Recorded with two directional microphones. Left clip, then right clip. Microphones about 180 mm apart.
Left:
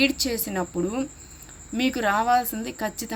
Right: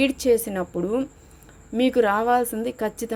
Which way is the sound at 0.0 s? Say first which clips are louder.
Right 4 dB; 40° right (ahead or behind).